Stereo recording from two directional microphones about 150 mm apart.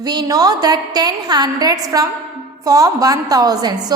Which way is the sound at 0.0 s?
25° right (ahead or behind).